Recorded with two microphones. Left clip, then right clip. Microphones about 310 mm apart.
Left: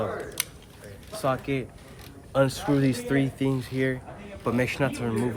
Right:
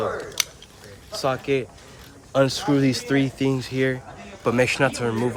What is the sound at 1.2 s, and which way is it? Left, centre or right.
Speech, right.